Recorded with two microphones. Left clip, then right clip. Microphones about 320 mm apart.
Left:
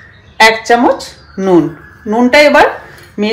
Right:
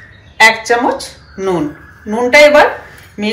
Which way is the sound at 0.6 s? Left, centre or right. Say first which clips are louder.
Left 4 dB; left.